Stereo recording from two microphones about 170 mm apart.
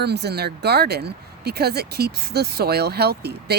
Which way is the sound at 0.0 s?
75° right (ahead or behind).